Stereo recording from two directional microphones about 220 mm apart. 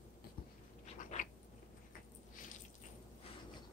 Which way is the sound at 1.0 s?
35° left (ahead or behind).